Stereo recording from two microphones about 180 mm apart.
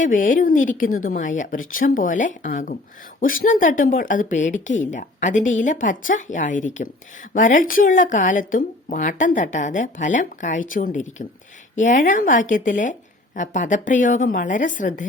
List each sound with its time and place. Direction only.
0.0 s speech: 45° left (ahead or behind)